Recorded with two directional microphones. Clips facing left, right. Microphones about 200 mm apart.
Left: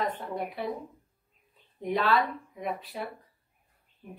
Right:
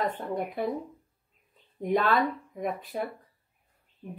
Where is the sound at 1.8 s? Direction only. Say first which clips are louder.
Right 2 dB; 50° right (ahead or behind).